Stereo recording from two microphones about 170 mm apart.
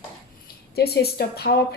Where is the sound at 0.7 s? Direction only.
70° left (ahead or behind).